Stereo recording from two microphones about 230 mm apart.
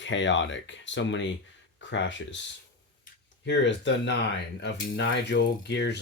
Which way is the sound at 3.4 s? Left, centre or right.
Left.